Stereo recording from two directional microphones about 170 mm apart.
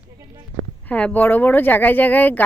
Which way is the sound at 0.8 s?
10° left (ahead or behind).